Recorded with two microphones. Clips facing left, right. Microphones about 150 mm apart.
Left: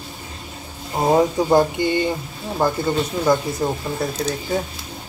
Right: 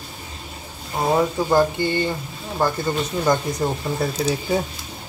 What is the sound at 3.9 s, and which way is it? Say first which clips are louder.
Speech: right 1 dB; centre (ahead or behind).